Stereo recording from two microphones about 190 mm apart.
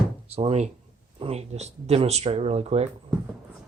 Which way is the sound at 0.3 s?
35° right (ahead or behind).